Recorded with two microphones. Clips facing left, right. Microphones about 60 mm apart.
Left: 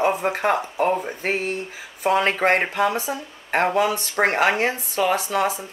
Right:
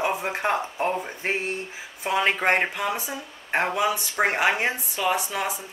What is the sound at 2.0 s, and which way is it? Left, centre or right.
Speech, left.